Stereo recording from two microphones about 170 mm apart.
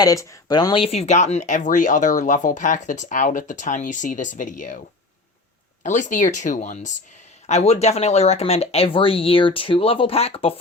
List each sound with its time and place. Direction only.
0.0 s speech: 20° left (ahead or behind); by 4.8 s 50° left (ahead or behind)
5.8 s speech: 45° left (ahead or behind)